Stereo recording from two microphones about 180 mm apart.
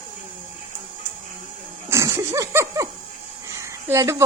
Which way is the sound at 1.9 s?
15° right (ahead or behind).